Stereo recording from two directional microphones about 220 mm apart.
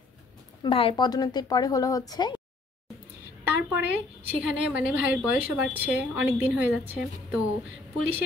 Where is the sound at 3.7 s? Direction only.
5° right (ahead or behind).